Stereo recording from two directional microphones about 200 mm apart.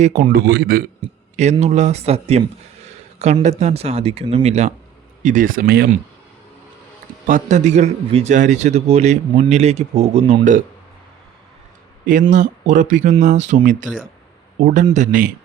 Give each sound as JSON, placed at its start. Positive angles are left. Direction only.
{"t": 0.0, "sound": "a man's voice", "side_deg": -40}
{"t": 1.4, "sound": "a man's voice", "side_deg": -35}
{"t": 7.3, "sound": "a man's voice", "side_deg": -40}
{"t": 12.3, "sound": "a man's voice", "side_deg": -40}